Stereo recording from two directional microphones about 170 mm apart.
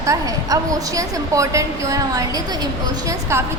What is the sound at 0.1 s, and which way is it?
A woman's voice, 20° right (ahead or behind).